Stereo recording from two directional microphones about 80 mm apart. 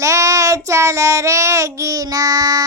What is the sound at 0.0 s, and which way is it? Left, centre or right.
Child singing, right.